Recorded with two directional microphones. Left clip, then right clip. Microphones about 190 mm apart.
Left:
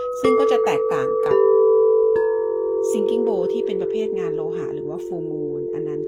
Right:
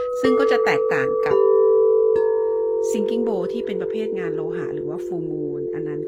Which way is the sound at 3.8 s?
25° right (ahead or behind).